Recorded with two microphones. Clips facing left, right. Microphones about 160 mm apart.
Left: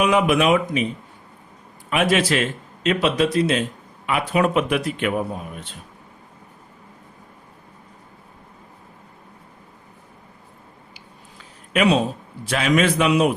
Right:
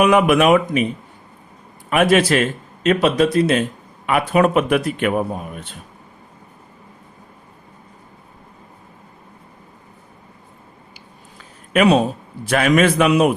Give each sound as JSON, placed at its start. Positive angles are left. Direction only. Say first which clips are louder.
{"t": 0.0, "sound": "speech", "louder": "right 4 dB", "side_deg": -55}
{"t": 1.9, "sound": "a man's voice", "louder": "right 5 dB", "side_deg": -50}
{"t": 11.7, "sound": "a man's voice", "louder": "right 4 dB", "side_deg": -50}